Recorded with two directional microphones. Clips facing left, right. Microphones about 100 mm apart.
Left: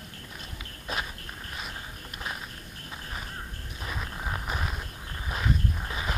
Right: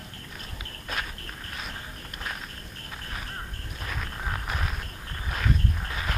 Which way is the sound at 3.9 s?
10° left (ahead or behind).